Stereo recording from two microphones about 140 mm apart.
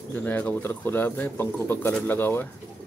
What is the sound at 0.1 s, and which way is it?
Speech, 10° left (ahead or behind).